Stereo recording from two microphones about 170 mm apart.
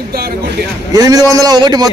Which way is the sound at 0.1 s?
65° right (ahead or behind).